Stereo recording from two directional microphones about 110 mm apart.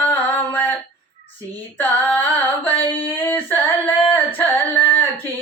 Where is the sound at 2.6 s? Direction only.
20° left (ahead or behind).